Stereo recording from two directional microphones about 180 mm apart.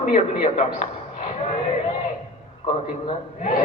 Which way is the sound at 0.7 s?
40° left (ahead or behind).